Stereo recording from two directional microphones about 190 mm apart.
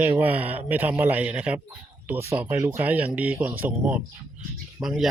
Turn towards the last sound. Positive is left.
turn(degrees=0)  # may be behind; listen again after turning